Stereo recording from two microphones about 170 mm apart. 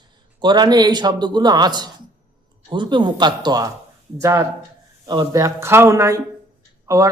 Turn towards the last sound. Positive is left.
turn(degrees=-20)  # may be behind; listen again after turning